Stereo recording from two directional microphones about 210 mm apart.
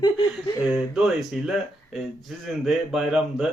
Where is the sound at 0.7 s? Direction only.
Centre (ahead or behind).